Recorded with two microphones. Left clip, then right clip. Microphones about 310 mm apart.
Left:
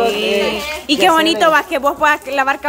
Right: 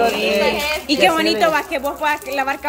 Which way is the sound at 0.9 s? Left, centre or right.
Centre.